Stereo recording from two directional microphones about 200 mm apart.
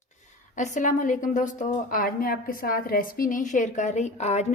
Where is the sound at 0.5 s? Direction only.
35° left (ahead or behind).